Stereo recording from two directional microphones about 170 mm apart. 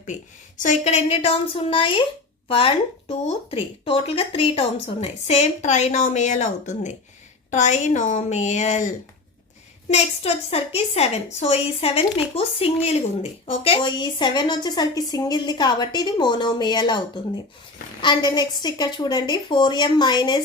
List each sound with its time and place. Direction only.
0.0 s a woman's voice: 45° left (ahead or behind)
9.9 s a woman's voice: 35° left (ahead or behind)